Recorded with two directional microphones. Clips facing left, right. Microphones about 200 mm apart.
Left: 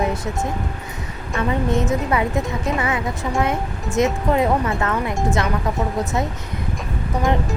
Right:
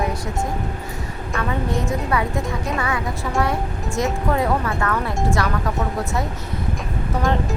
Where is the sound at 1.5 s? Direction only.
20° left (ahead or behind).